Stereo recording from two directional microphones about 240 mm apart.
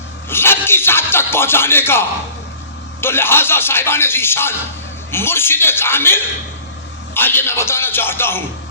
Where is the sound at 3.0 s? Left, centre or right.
Centre.